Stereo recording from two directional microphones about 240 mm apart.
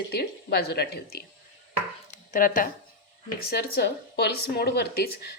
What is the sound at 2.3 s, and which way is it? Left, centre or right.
Speech, left.